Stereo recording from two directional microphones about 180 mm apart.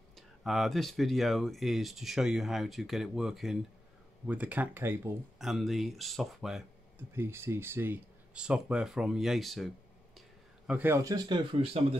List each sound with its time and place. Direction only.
0.1 s speech: centre (ahead or behind)
5.4 s speech: centre (ahead or behind)
7.2 s speech: 15° right (ahead or behind)
10.7 s speech: 10° right (ahead or behind); by 12.0 s 30° right (ahead or behind)